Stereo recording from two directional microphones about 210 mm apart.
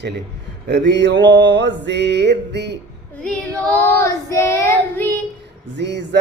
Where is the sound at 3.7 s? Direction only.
10° left (ahead or behind).